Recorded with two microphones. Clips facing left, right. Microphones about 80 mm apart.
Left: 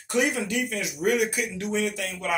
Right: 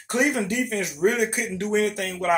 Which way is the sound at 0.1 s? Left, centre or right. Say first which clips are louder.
Right 2 dB; right.